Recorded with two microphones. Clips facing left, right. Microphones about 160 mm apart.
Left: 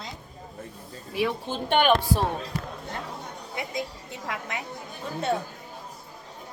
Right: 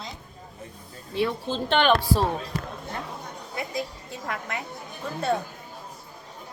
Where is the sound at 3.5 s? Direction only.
20° left (ahead or behind).